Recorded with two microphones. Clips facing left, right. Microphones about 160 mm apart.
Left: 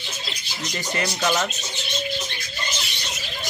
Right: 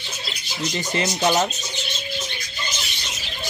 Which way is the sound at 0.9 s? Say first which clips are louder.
Right 3 dB; 25° right (ahead or behind).